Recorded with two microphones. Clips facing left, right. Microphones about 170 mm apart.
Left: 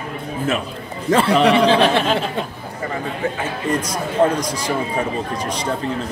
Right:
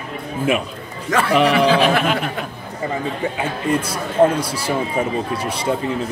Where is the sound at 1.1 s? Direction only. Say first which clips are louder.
Left 2 dB; 30° left (ahead or behind).